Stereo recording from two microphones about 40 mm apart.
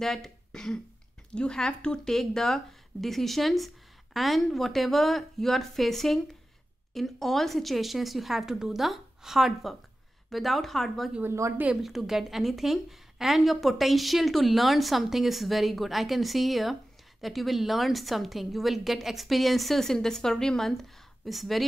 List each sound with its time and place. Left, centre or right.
0.0 s a woman's voice: centre
11.8 s a woman's voice: centre
21.3 s a woman's voice: centre